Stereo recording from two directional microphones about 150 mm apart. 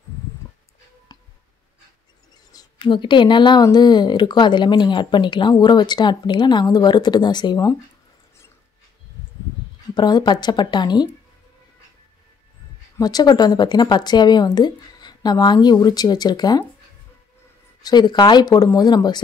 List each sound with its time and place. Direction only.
1.1 s a sound: 25° left (ahead or behind)
2.5 s speech: 30° left (ahead or behind)
9.9 s speech: 30° left (ahead or behind)
12.9 s speech: 25° left (ahead or behind)
17.8 s speech: 30° left (ahead or behind)